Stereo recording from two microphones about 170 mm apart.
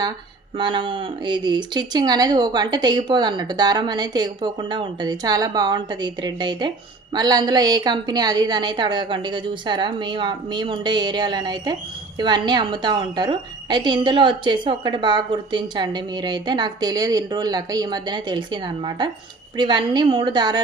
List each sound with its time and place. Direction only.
0.5 s speech: 30° right (ahead or behind)